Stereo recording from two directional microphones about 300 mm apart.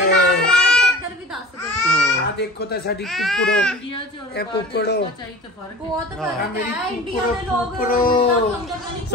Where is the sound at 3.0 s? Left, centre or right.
Centre.